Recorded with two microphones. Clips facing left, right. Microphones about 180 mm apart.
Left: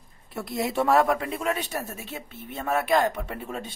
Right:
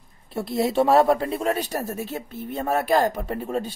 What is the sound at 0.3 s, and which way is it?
Speech, 30° right (ahead or behind).